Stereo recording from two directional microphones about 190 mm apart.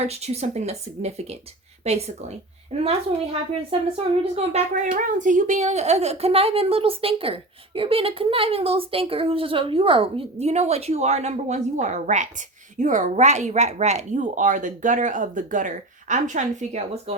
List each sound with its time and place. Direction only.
0.0 s a woman's voice: 35° right (ahead or behind)